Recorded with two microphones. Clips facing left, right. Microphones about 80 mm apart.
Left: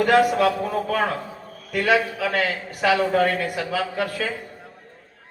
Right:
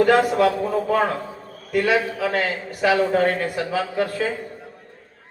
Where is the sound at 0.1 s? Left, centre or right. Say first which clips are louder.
Right 1 dB; right.